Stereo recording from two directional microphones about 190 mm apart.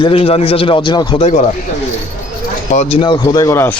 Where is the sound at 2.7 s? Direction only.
35° left (ahead or behind).